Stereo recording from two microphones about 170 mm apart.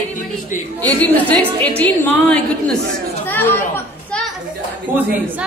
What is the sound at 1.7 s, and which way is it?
A woman's voice, 10° left (ahead or behind).